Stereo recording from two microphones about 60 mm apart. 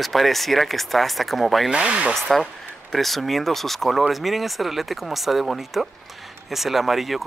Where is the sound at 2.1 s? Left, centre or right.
Centre.